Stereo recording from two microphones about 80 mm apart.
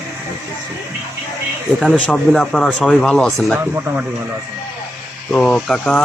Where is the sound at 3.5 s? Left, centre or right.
Right.